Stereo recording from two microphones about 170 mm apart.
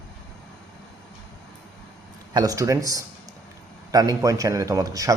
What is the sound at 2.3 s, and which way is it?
Speech, 20° right (ahead or behind).